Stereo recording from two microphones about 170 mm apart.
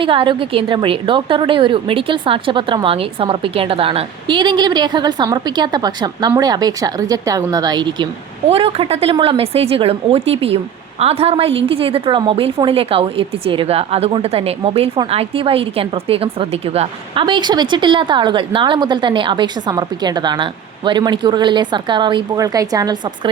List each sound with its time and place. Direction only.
0.0 s a woman's voice: 30° right (ahead or behind)